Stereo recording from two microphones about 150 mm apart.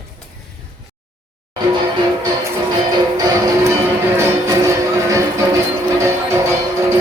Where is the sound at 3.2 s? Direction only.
25° right (ahead or behind).